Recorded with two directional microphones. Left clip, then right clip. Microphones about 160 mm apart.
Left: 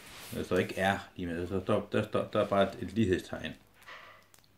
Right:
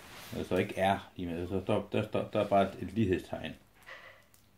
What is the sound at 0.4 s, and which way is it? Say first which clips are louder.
Speech: even; 25° left (ahead or behind).